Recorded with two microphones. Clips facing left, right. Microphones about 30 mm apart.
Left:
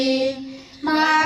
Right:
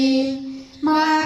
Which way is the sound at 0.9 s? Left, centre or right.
Left.